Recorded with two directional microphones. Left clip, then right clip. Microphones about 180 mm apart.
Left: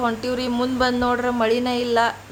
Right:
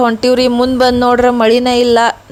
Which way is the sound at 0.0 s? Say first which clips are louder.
Right 13 dB; 45° right (ahead or behind).